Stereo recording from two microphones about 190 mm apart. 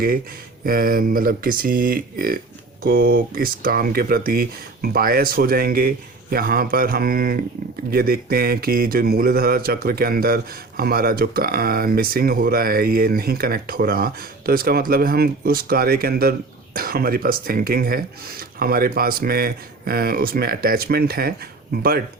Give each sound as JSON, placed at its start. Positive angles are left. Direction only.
{"t": 0.6, "sound": "speech", "side_deg": -50}